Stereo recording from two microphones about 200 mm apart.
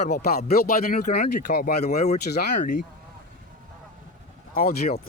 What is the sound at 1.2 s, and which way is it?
Speech, 35° left (ahead or behind).